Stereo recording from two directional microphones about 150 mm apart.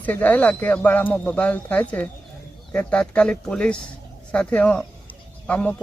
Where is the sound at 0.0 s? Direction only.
10° left (ahead or behind).